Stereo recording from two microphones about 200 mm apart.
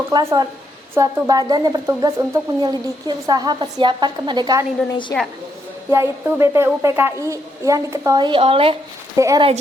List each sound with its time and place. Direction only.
0.1 s speech: 20° right (ahead or behind)
5.9 s a woman's voice: 15° right (ahead or behind)
9.1 s a woman's voice: 15° right (ahead or behind)